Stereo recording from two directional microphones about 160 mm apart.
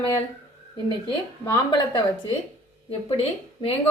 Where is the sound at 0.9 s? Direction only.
30° left (ahead or behind).